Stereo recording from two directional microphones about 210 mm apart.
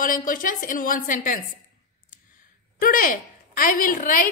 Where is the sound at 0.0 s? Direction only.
40° left (ahead or behind).